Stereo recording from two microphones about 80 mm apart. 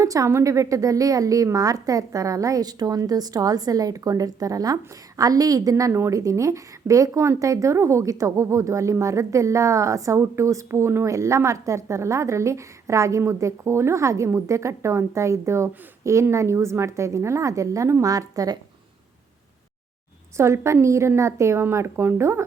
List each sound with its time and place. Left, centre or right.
0.0 s a woman's voice: right
20.3 s a woman's voice: right